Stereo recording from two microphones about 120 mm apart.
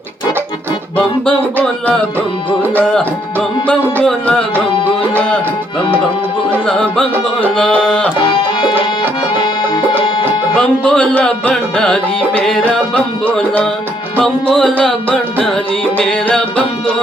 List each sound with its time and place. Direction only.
0.9 s music: 10° left (ahead or behind)
6.7 s music: 5° left (ahead or behind)
8.2 s music: 45° left (ahead or behind)
10.6 s music: 10° left (ahead or behind)